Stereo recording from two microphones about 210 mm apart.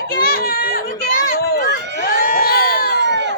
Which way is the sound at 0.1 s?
45° left (ahead or behind).